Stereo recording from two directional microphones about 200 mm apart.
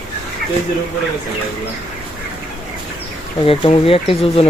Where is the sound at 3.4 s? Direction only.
25° left (ahead or behind).